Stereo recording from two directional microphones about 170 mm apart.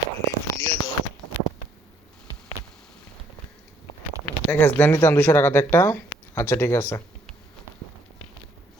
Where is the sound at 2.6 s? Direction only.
20° right (ahead or behind).